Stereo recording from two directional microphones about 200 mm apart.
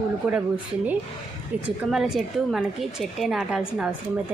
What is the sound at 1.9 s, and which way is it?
A woman's voice, centre (ahead or behind).